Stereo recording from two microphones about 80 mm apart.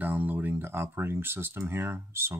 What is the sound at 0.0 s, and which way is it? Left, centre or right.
Speech, right.